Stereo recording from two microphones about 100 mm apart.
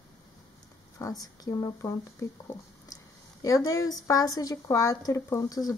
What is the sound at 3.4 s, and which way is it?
Speech, 35° left (ahead or behind).